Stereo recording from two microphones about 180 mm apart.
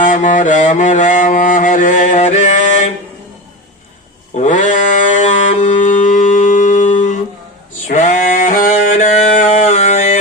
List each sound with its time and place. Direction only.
0.0 s mantra: 45° left (ahead or behind)
4.4 s mantra: 45° left (ahead or behind)
7.9 s a sound: 45° left (ahead or behind)